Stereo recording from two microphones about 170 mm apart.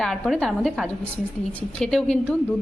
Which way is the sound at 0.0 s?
5° left (ahead or behind).